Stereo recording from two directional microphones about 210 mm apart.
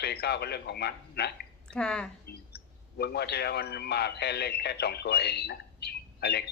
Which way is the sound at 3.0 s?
50° left (ahead or behind).